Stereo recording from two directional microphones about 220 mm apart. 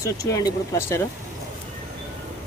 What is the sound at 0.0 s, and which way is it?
Speech, 15° left (ahead or behind).